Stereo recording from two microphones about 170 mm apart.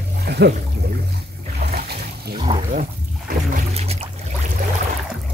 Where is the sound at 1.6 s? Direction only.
70° right (ahead or behind).